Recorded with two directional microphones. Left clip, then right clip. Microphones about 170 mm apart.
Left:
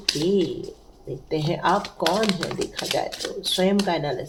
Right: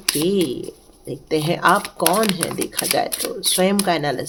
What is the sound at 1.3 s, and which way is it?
Speech, 65° right (ahead or behind).